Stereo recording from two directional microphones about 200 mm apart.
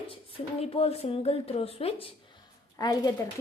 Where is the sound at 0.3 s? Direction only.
30° left (ahead or behind).